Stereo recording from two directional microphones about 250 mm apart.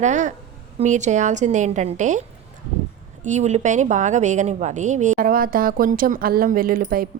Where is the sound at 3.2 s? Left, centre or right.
Right.